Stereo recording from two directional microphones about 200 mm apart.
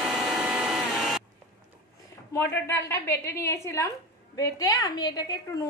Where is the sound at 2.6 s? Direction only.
15° left (ahead or behind).